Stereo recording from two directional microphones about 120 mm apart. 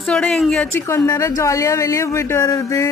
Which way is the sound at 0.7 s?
20° left (ahead or behind).